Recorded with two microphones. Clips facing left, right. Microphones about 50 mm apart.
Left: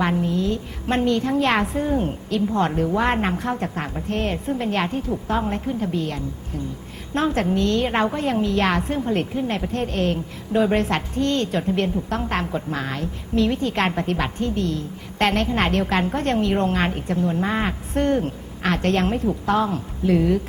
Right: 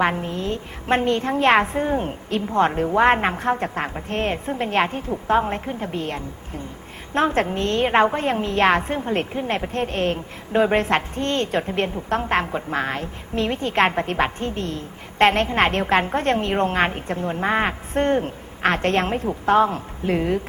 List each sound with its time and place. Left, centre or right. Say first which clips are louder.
0.0 s a woman's voice: left 1 dB; right